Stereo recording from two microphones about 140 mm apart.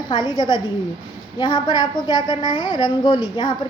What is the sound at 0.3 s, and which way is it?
A woman's voice, 30° left (ahead or behind).